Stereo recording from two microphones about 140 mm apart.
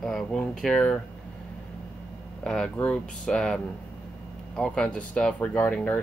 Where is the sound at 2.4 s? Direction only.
5° left (ahead or behind).